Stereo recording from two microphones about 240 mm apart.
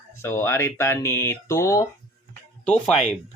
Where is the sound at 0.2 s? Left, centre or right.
Centre.